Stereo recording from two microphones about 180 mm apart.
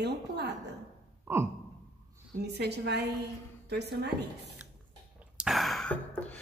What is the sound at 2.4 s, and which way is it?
A woman's voice, 65° right (ahead or behind).